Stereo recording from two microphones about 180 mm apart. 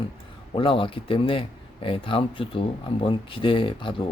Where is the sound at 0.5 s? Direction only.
30° left (ahead or behind).